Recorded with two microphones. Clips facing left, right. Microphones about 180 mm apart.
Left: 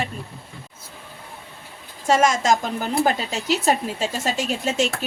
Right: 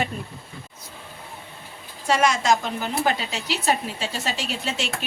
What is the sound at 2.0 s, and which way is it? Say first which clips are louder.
A woman's voice: left 2 dB; 45° left (ahead or behind).